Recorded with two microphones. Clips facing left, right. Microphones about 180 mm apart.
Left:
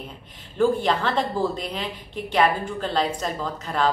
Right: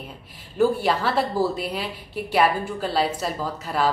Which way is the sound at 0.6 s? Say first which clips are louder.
Even; 10° right (ahead or behind).